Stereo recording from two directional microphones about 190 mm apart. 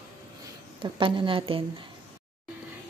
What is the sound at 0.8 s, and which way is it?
Speech, 25° right (ahead or behind).